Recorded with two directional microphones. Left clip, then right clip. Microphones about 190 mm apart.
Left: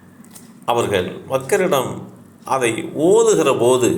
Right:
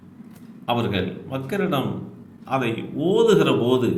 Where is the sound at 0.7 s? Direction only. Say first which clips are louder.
Left 6 dB; 15° left (ahead or behind).